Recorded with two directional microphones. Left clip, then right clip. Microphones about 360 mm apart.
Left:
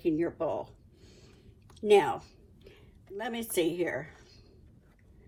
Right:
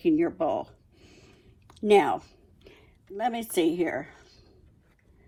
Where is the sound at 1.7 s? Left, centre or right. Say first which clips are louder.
Right 3 dB; centre.